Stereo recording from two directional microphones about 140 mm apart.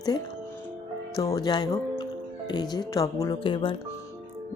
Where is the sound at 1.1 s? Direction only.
25° left (ahead or behind).